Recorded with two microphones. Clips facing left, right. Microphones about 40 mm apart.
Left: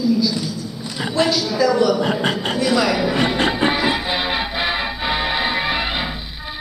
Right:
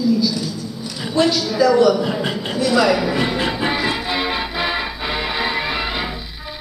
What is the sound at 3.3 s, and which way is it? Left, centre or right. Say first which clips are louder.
Music: left 2 dB; left.